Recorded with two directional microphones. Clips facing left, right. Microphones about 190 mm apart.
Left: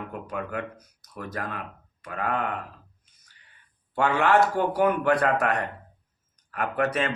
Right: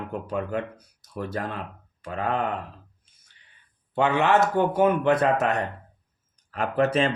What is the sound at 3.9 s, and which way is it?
Speech, 20° right (ahead or behind).